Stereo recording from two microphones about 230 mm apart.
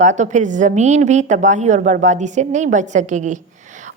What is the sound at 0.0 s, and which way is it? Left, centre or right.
A woman's voice, right.